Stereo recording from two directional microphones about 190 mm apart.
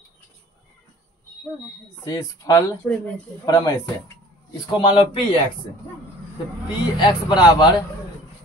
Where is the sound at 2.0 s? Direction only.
20° left (ahead or behind).